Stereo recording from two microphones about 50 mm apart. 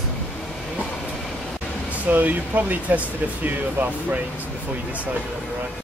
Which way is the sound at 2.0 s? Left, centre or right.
Right.